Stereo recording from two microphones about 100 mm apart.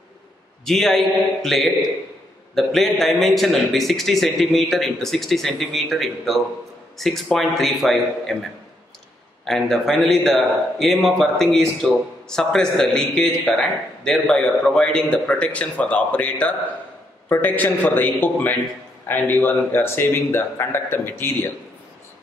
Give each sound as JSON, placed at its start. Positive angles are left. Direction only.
{"t": 0.7, "sound": "a man's voice", "side_deg": 5}